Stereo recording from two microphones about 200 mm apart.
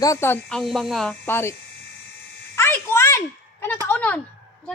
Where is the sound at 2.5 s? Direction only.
10° left (ahead or behind).